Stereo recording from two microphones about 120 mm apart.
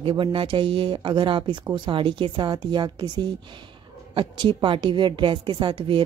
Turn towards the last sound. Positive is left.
turn(degrees=-45)  # may be behind; listen again after turning